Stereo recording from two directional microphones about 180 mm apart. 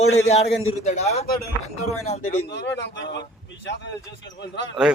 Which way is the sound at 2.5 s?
70° left (ahead or behind).